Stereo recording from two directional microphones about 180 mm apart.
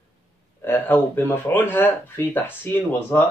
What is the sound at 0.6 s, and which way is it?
Speech, 10° left (ahead or behind).